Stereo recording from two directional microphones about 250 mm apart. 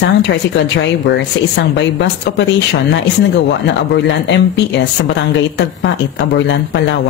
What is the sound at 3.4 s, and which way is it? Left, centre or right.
Speech, left.